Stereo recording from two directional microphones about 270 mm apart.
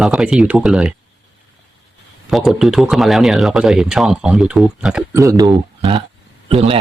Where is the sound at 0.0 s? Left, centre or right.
Centre.